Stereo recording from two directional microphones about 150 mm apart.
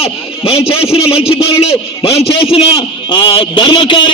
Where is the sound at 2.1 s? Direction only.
40° left (ahead or behind).